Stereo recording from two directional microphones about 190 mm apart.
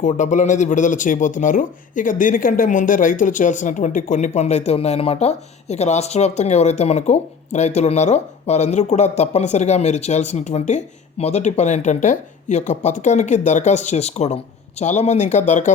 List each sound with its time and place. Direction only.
0.0 s speech: 40° left (ahead or behind)